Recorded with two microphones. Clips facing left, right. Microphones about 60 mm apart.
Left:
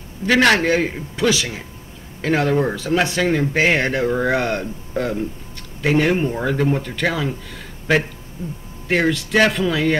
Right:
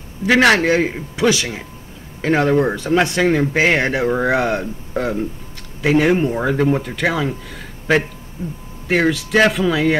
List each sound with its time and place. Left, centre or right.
0.3 s speech: centre
8.4 s speech: right
8.8 s speech: centre